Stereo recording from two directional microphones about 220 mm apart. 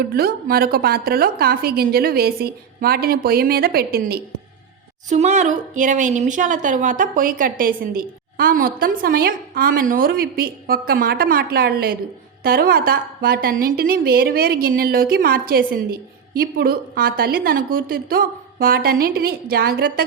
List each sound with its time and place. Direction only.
0.0 s a woman's voice: 45° right (ahead or behind)
5.0 s a woman's voice: 30° right (ahead or behind)